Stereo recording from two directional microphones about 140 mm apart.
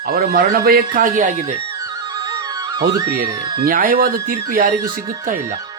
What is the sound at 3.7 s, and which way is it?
Speech, 85° right.